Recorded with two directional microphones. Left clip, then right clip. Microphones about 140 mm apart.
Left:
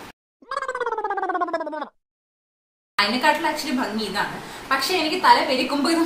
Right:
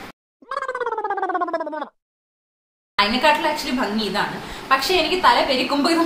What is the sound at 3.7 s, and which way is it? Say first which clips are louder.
A woman's voice: right 2 dB; 15° right (ahead or behind).